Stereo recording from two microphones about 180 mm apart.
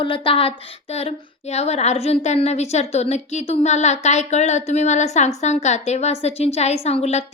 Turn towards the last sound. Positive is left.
turn(degrees=35)  # may be behind; listen again after turning